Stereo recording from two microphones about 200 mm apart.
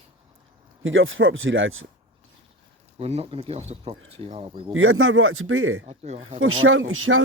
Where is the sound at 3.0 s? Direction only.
30° right (ahead or behind).